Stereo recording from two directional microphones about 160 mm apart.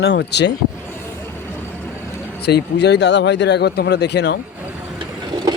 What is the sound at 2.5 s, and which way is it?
Speech, 90° left.